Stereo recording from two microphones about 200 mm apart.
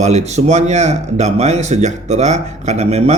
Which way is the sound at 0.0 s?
35° right (ahead or behind).